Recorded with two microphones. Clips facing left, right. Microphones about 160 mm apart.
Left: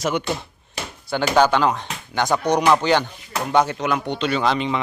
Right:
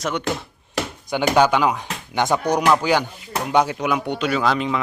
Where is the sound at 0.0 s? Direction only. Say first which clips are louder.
Left 1 dB; 5° left (ahead or behind).